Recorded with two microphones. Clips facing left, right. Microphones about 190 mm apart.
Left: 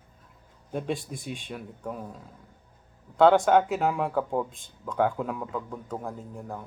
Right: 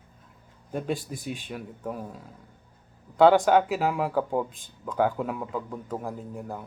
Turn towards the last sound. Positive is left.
turn(degrees=-5)  # may be behind; listen again after turning